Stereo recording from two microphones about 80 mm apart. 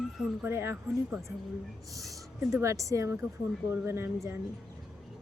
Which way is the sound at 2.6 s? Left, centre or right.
Right.